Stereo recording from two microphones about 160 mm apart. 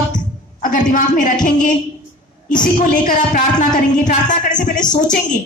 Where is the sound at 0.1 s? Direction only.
55° left (ahead or behind).